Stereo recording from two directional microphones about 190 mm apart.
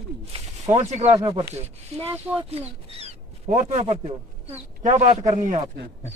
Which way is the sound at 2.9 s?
35° right (ahead or behind).